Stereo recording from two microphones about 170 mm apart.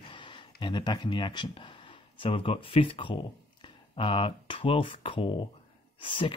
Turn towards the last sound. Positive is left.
turn(degrees=30)  # may be behind; listen again after turning